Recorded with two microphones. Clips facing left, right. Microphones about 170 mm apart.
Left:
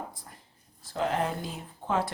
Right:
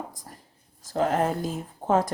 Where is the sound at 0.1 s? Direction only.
45° right (ahead or behind).